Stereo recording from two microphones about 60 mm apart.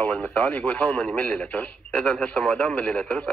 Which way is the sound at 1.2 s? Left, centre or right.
Centre.